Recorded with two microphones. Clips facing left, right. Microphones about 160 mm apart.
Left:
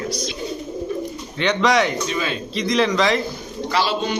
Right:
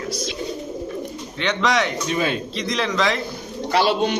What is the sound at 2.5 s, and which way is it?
Speech, centre (ahead or behind).